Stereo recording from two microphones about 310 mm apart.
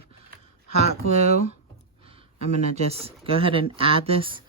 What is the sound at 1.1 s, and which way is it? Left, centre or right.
Speech, centre.